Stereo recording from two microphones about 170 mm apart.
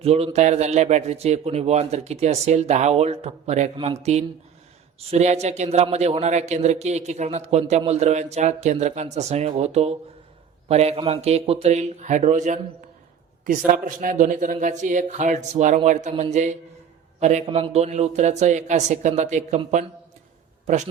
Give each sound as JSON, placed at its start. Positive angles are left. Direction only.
{"t": 0.0, "sound": "a man's voice", "side_deg": -35}
{"t": 4.9, "sound": "a man's voice", "side_deg": -40}
{"t": 13.8, "sound": "a man's voice", "side_deg": -50}